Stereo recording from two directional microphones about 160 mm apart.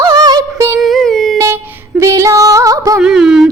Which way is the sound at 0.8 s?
Centre (ahead or behind).